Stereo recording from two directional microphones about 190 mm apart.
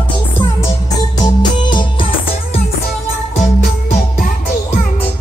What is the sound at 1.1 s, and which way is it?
Music, 20° left (ahead or behind).